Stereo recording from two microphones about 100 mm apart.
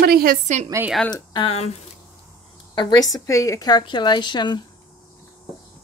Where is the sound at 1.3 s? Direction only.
75° left (ahead or behind).